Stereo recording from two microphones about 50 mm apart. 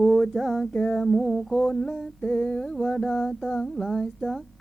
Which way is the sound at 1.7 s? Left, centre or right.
Centre.